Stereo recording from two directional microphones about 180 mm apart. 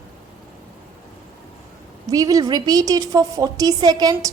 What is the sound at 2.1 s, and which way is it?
A woman's voice, 20° right (ahead or behind).